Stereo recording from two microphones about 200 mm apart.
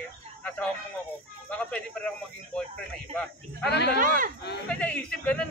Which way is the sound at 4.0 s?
45° right (ahead or behind).